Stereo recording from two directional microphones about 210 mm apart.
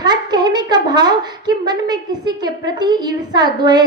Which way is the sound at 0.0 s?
20° right (ahead or behind).